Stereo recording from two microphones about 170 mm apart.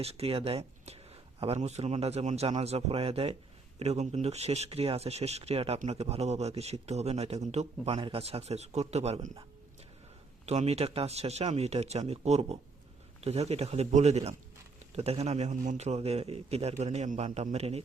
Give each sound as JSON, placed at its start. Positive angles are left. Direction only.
{"t": 0.0, "sound": "speech", "side_deg": -35}
{"t": 10.4, "sound": "speech", "side_deg": -40}